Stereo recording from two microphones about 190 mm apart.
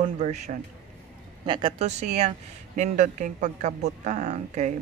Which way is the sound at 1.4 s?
25° right (ahead or behind).